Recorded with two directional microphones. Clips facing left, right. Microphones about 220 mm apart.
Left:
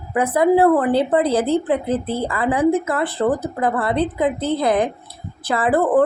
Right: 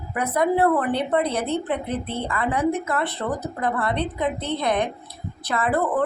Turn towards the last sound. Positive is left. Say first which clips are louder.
# left 5 dB
turn(degrees=30)  # may be behind; listen again after turning